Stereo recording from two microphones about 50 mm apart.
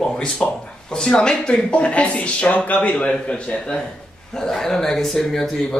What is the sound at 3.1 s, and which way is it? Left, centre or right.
Speech, left.